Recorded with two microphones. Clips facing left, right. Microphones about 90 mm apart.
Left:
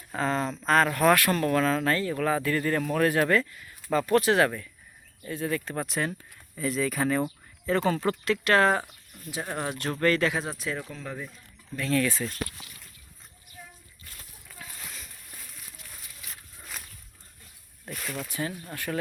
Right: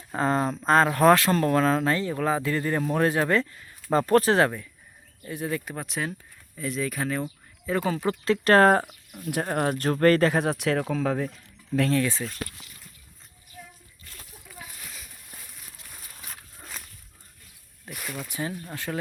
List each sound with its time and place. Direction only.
0.2 s speech: 35° right (ahead or behind)
1.8 s speech: 20° right (ahead or behind)
5.2 s speech: 15° right (ahead or behind)
5.7 s speech: centre (ahead or behind)
8.2 s speech: 35° right (ahead or behind)
10.4 s speech: 65° right (ahead or behind)
11.9 s speech: 25° right (ahead or behind)
16.0 s dog: 40° right (ahead or behind)
17.8 s speech: 5° right (ahead or behind)
18.3 s speech: 20° right (ahead or behind)